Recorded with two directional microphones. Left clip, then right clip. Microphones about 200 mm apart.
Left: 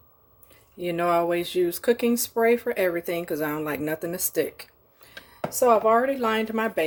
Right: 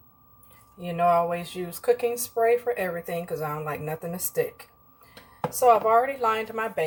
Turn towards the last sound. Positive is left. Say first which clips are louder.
# left 2 dB
turn(degrees=50)  # may be behind; listen again after turning